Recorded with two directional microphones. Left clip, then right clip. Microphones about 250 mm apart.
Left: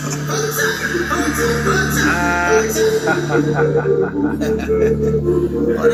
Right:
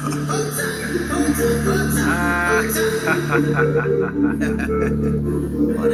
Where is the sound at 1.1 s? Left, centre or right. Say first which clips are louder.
Even; left.